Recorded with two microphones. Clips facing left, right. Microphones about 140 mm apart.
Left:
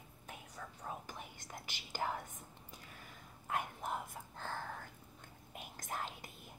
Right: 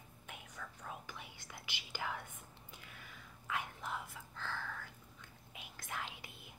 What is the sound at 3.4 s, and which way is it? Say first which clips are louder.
Whispering: left 3 dB; 50° left (ahead or behind).